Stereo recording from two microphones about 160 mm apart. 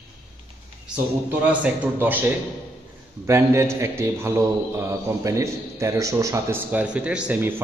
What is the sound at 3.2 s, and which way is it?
A man's voice, 15° right (ahead or behind).